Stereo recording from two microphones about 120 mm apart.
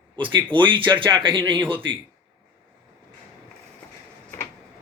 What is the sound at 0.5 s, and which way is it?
Speech, 45° right (ahead or behind).